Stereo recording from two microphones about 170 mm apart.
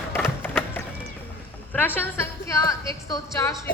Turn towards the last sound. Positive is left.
turn(degrees=15)  # may be behind; listen again after turning